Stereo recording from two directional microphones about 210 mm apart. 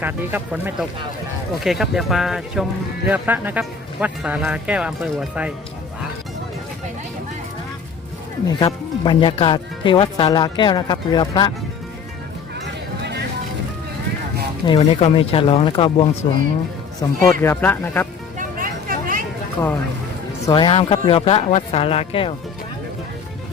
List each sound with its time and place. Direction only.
0.0 s speech: 10° right (ahead or behind)
8.4 s speech: 20° left (ahead or behind)
13.0 s vehicle: 50° right (ahead or behind)
14.7 s speech: 25° left (ahead or behind)
17.0 s speech: 15° left (ahead or behind)
18.3 s vehicle: 40° right (ahead or behind)
19.6 s speech: 15° left (ahead or behind)